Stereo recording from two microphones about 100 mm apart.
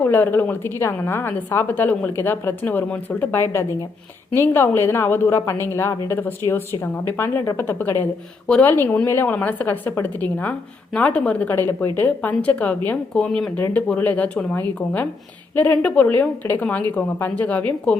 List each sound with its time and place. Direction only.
0.0 s a woman's voice: 20° left (ahead or behind)